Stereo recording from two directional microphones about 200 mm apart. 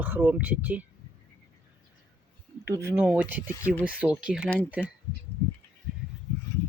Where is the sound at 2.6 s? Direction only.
10° right (ahead or behind).